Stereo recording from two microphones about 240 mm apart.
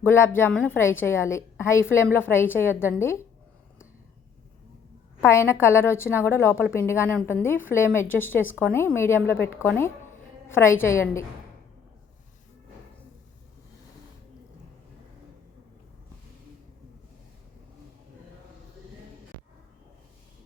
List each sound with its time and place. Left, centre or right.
0.0 s a woman's voice: centre
5.2 s a woman's voice: centre